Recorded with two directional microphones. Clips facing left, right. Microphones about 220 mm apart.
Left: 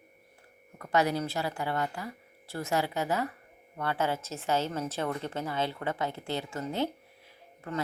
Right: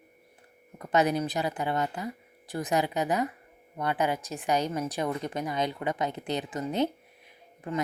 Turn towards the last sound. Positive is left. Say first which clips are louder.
# right 3 dB
turn(degrees=-15)  # may be behind; listen again after turning